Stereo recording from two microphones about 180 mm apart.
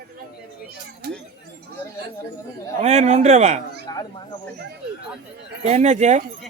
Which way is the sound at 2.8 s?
40° right (ahead or behind).